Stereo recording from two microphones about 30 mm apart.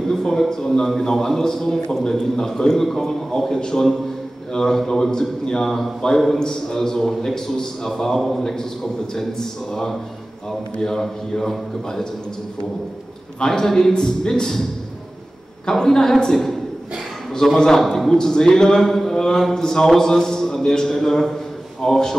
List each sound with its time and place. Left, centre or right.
0.1 s a man's voice: centre
6.4 s a man's voice: left
8.2 s a man's voice: centre
8.5 s a man's voice: centre
13.5 s a man's voice: centre
14.2 s a man's voice: left
15.8 s a man's voice: centre
17.6 s a man's voice: centre